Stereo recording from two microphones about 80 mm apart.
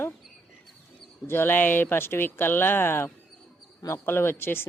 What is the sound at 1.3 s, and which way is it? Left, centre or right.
Speech, left.